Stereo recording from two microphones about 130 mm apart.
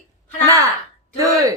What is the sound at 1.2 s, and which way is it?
Speech, 25° right (ahead or behind).